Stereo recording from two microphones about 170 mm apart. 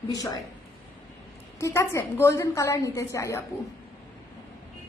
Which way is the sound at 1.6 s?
15° left (ahead or behind).